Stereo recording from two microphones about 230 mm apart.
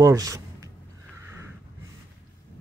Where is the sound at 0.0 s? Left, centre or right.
Centre.